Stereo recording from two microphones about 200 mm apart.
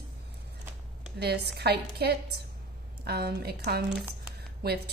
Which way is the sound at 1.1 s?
55° right (ahead or behind).